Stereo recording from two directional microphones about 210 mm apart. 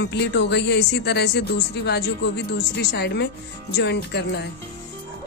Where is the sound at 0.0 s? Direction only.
55° left (ahead or behind).